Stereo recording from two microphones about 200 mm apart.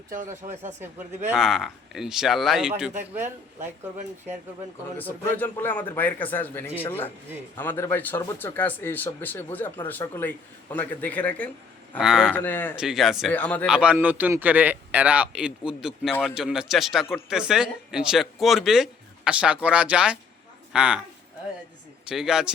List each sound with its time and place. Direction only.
0.1 s speech: 40° right (ahead or behind)
1.3 s a man's voice: centre (ahead or behind)
5.4 s speech: 10° left (ahead or behind)
11.9 s a man's voice: 5° right (ahead or behind)
12.3 s speech: 10° left (ahead or behind)
12.7 s a man's voice: 5° right (ahead or behind)
13.7 s a man's voice: 5° right (ahead or behind)
22.1 s a man's voice: centre (ahead or behind)